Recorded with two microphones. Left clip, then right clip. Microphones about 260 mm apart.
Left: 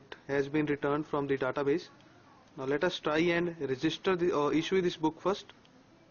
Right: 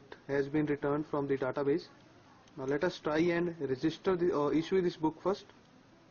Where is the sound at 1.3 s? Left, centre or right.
Centre.